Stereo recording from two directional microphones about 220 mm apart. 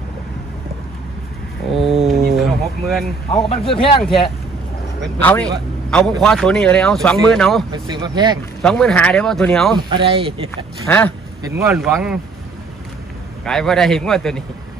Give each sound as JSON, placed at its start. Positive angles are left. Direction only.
{"t": 1.7, "sound": "a sound", "side_deg": 0}
{"t": 3.4, "sound": "speech", "side_deg": 25}
{"t": 5.2, "sound": "speech", "side_deg": 5}
{"t": 7.7, "sound": "speech", "side_deg": -20}
{"t": 8.6, "sound": "speech", "side_deg": 5}
{"t": 9.8, "sound": "speech", "side_deg": -20}
{"t": 10.9, "sound": "speech", "side_deg": 10}
{"t": 11.4, "sound": "speech", "side_deg": -10}
{"t": 13.5, "sound": "speech", "side_deg": 0}